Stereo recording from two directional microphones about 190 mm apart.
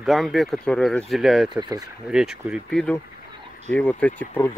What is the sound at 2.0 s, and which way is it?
Speech, 5° right (ahead or behind).